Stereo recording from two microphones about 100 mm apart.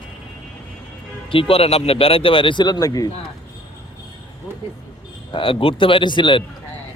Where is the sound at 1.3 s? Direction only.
70° left (ahead or behind); by 3.1 s 40° left (ahead or behind).